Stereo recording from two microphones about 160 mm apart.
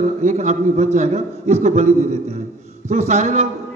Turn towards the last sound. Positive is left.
turn(degrees=-45)  # may be behind; listen again after turning